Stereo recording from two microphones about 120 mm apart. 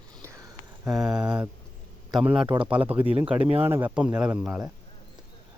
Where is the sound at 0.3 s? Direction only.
25° right (ahead or behind).